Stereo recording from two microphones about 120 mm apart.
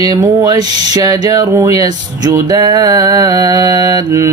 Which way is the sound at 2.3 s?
35° right (ahead or behind).